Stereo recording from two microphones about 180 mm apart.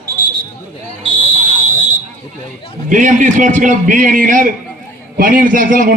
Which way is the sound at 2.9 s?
45° right (ahead or behind).